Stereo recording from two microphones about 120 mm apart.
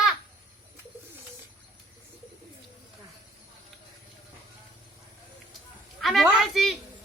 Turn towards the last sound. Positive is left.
turn(degrees=0)  # may be behind; listen again after turning